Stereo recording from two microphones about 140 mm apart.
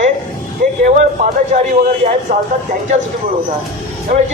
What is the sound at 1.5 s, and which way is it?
Speech, 60° right (ahead or behind).